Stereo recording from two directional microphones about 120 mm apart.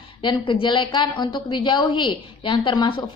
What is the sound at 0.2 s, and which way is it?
A woman's voice, 45° left (ahead or behind).